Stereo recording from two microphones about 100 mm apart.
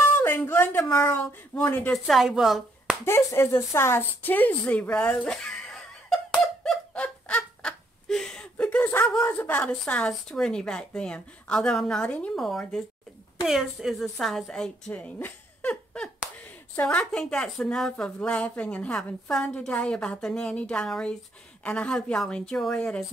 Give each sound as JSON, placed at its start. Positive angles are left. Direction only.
{"t": 0.2, "sound": "speech", "side_deg": 20}
{"t": 2.0, "sound": "speech", "side_deg": 0}
{"t": 3.1, "sound": "a woman's voice", "side_deg": 25}
{"t": 6.9, "sound": "fowl", "side_deg": 10}
{"t": 9.7, "sound": "a woman's voice", "side_deg": 10}
{"t": 14.9, "sound": "speech", "side_deg": 15}
{"t": 15.7, "sound": "a sound", "side_deg": 10}
{"t": 16.8, "sound": "speech", "side_deg": 10}